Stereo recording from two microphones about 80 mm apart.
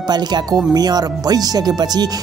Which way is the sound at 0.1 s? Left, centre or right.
Right.